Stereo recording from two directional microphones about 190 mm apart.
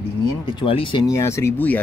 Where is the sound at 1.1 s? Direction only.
15° left (ahead or behind).